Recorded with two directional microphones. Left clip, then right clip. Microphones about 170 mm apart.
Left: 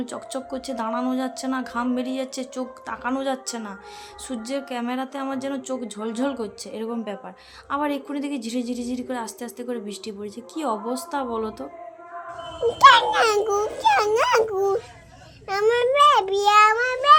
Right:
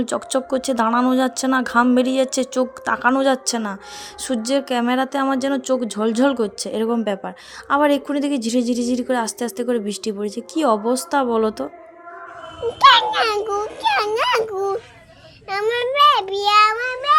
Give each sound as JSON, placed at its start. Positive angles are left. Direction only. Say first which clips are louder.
{"t": 0.0, "sound": "speech", "louder": "right 9 dB", "side_deg": -40}
{"t": 12.6, "sound": "a child's voice", "louder": "right 1 dB", "side_deg": 15}